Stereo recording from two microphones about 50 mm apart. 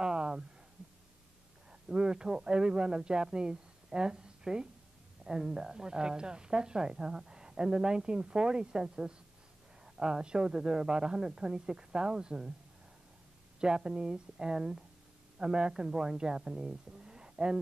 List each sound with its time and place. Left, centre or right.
0.0 s a sound: centre
1.7 s a man's voice: centre
13.6 s a woman's voice: centre